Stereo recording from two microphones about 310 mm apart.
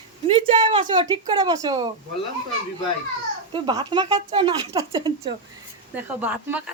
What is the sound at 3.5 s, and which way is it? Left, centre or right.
Speech, centre.